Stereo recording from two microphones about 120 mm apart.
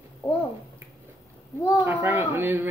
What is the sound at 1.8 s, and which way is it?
Speech, 15° right (ahead or behind).